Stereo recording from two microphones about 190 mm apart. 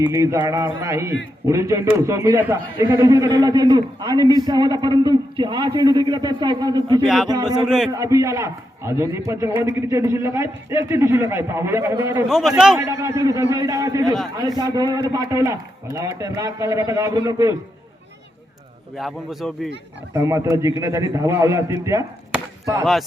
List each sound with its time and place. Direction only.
0.0 s a man's voice: 15° right (ahead or behind)
12.3 s speech: centre (ahead or behind)
12.8 s a man's voice: 15° right (ahead or behind)
18.9 s speech: centre (ahead or behind)
20.1 s a man's voice: 15° right (ahead or behind)